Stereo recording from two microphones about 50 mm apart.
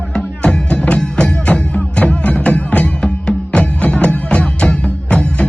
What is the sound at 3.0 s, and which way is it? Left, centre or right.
Music, centre.